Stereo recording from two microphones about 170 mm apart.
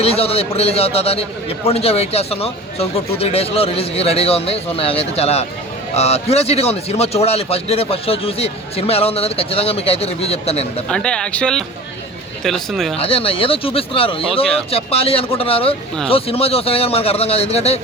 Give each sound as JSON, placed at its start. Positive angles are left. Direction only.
{"t": 0.0, "sound": "a man's voice", "side_deg": 35}
{"t": 10.8, "sound": "speech", "side_deg": 5}
{"t": 13.0, "sound": "a man's voice", "side_deg": 35}